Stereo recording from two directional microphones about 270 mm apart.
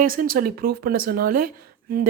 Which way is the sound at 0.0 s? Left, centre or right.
Right.